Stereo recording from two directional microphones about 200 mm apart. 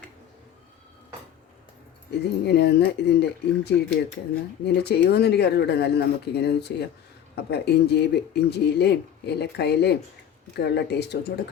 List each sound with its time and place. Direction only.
2.0 s speech: 55° left (ahead or behind)